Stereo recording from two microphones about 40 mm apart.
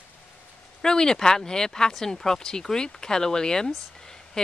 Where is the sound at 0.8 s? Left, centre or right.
Centre.